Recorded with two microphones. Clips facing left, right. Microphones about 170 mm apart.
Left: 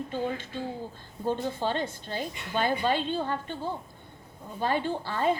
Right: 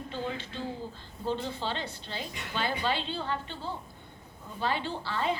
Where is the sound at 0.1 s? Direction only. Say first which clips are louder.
Left 2 dB; 50° left (ahead or behind).